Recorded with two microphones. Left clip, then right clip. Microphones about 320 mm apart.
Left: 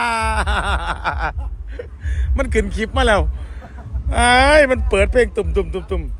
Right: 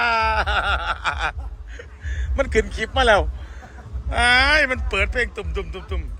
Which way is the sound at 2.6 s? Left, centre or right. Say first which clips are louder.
Left 3 dB; centre.